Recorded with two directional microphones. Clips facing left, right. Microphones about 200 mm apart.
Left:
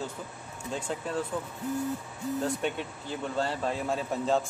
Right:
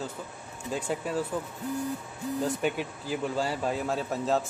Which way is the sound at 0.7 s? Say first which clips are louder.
Right 3 dB; 5° right (ahead or behind).